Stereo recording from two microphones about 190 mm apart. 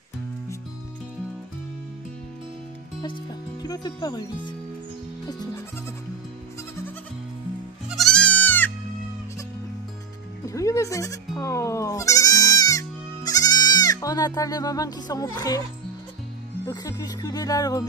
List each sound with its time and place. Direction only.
3.6 s music: 20° left (ahead or behind)
7.9 s music: centre (ahead or behind)
10.4 s bleat: 15° left (ahead or behind)
16.6 s music: 20° left (ahead or behind)